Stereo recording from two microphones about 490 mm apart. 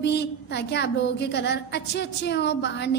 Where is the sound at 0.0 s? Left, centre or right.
Left.